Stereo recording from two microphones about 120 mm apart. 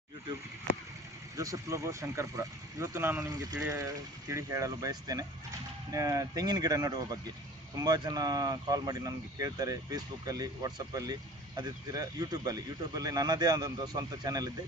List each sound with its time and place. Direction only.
1.4 s speech: 25° right (ahead or behind)